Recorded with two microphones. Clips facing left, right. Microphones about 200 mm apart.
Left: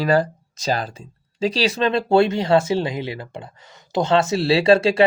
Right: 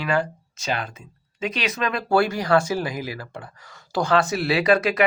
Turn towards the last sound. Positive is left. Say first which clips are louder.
# left 4 dB
turn(degrees=30)  # may be behind; listen again after turning